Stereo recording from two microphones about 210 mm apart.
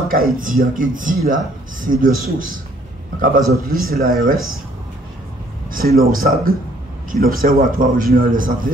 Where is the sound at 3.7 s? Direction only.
45° right (ahead or behind).